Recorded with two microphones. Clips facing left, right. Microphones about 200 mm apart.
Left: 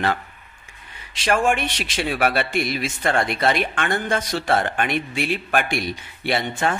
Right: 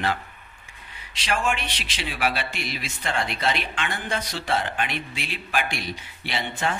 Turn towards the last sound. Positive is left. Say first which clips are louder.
# left 5 dB
turn(degrees=50)  # may be behind; listen again after turning